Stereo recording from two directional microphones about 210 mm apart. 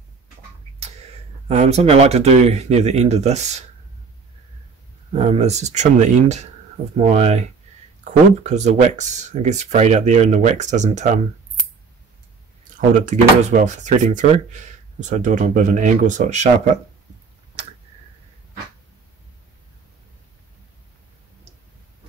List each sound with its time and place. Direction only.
1.5 s speech: 30° right (ahead or behind)
5.1 s speech: 30° right (ahead or behind)
12.9 s speech: 35° right (ahead or behind)